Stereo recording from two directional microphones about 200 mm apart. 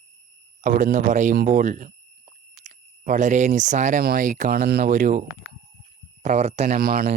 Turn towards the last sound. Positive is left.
turn(degrees=-45)  # may be behind; listen again after turning